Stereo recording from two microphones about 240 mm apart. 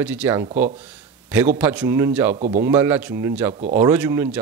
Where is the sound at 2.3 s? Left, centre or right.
Right.